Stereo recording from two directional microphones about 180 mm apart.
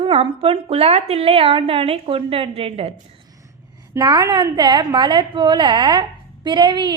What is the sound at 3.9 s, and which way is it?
A woman's voice, 20° right (ahead or behind).